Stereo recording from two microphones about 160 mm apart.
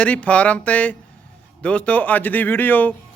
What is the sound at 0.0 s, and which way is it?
A man's voice, 10° left (ahead or behind).